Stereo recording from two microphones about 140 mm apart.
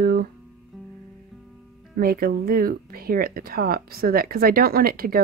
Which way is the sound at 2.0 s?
90° right.